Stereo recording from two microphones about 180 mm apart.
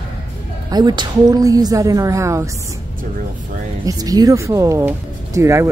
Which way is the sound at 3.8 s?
20° right (ahead or behind).